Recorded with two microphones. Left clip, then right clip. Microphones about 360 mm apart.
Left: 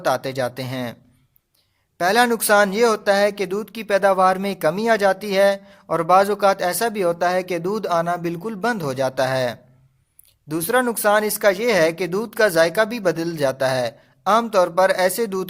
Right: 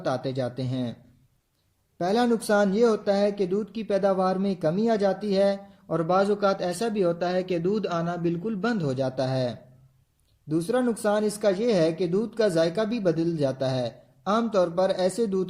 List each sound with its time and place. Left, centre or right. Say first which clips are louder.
0.0 s speech: left 7 dB; centre
2.0 s speech: left 7 dB; left